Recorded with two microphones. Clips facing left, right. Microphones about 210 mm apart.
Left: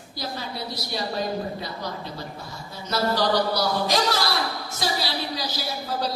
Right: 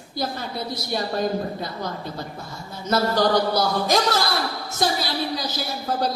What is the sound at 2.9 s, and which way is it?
A man's voice, 50° right (ahead or behind).